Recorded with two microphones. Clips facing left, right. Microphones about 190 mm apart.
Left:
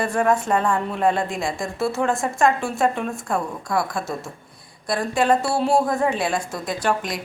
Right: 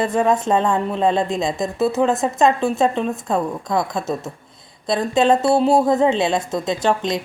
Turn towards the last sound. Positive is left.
turn(degrees=-25)  # may be behind; listen again after turning